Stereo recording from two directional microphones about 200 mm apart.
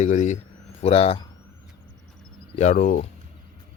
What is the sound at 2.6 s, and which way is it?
Speech, 35° left (ahead or behind).